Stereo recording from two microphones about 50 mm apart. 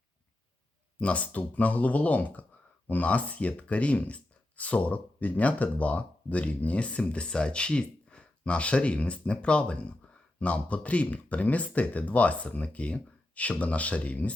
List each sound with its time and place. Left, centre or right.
0.9 s speech: left